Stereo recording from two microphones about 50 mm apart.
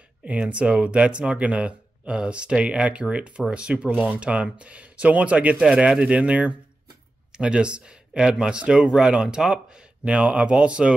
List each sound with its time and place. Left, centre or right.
0.2 s speech: right